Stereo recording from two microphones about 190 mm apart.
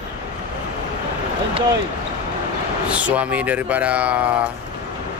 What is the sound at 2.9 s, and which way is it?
Speech, 5° right (ahead or behind).